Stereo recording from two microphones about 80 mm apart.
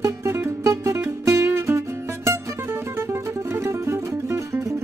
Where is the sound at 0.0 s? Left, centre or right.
Right.